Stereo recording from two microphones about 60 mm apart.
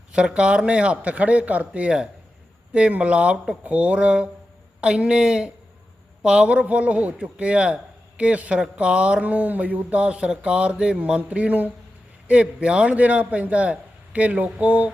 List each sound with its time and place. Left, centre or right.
0.1 s speech: centre